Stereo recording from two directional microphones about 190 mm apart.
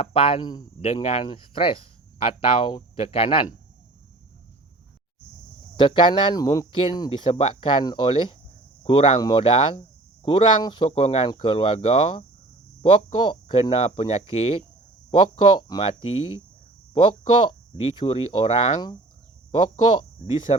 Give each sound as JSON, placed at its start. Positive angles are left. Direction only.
{"t": 0.0, "sound": "speech", "side_deg": 30}
{"t": 5.7, "sound": "speech", "side_deg": 25}
{"t": 17.7, "sound": "speech", "side_deg": 25}
{"t": 20.2, "sound": "speech", "side_deg": 30}